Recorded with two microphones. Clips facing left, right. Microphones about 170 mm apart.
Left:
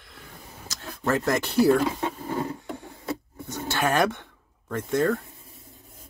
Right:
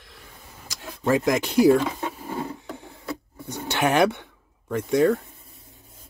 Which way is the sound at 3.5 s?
15° right (ahead or behind).